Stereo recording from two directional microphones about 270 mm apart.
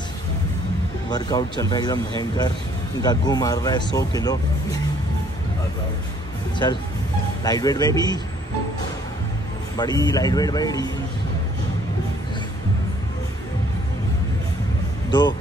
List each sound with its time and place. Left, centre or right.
1.1 s speech: centre
3.0 s speech: centre
7.4 s speech: centre
9.8 s speech: centre
15.0 s speech: centre